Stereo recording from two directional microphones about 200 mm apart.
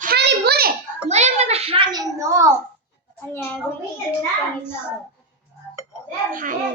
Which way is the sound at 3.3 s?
10° left (ahead or behind).